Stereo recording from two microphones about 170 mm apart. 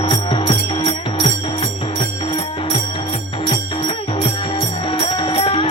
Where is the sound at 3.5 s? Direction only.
30° left (ahead or behind).